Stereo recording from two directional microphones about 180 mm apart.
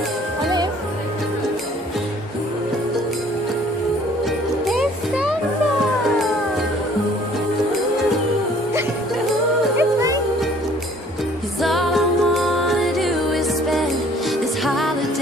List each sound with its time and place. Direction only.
4.6 s music: centre (ahead or behind)
9.8 s music: 20° right (ahead or behind)
11.6 s music: centre (ahead or behind)